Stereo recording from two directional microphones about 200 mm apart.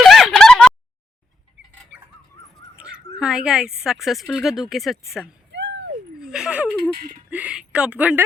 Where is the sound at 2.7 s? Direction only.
5° right (ahead or behind).